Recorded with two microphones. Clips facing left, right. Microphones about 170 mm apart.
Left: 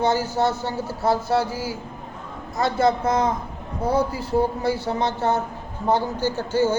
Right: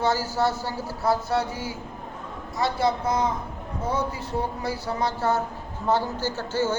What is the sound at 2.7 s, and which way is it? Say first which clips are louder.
Speech: left 5 dB; 45° left (ahead or behind).